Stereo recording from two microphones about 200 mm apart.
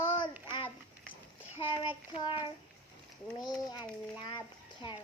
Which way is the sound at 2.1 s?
25° left (ahead or behind).